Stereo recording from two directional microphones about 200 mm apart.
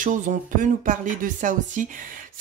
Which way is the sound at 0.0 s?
40° right (ahead or behind).